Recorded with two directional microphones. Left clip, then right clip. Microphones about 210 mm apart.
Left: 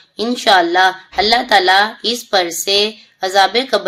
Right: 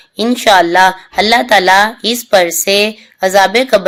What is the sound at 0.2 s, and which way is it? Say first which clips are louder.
Speech: right 3 dB; 35° right (ahead or behind).